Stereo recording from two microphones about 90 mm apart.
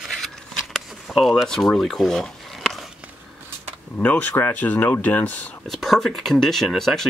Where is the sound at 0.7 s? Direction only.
Centre (ahead or behind).